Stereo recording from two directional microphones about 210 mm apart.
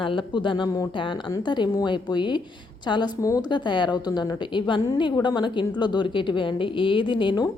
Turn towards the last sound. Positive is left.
turn(degrees=20)  # may be behind; listen again after turning